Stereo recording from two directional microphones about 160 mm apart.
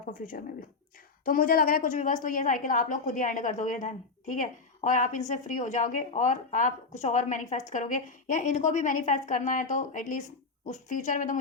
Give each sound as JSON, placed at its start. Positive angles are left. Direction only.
{"t": 0.1, "sound": "a woman's voice", "side_deg": 60}